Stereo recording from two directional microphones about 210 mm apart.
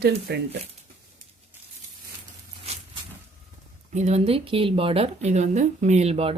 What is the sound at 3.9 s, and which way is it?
Speech, 30° right (ahead or behind).